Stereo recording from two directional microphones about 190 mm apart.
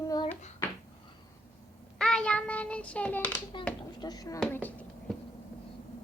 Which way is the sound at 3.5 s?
25° left (ahead or behind).